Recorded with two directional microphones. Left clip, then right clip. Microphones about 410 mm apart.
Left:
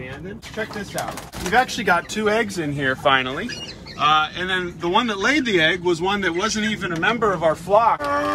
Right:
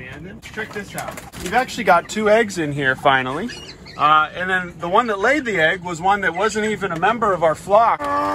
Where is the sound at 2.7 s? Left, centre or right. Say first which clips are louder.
Right 2 dB; centre.